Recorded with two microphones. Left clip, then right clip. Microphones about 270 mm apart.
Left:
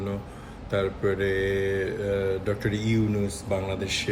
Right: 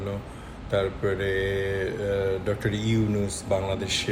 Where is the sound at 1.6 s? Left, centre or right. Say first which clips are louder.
Left 1 dB; centre.